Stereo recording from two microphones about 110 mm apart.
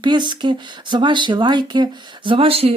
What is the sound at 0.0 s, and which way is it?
Speech, 45° right (ahead or behind).